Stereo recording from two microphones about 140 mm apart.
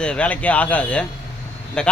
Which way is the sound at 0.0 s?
10° left (ahead or behind).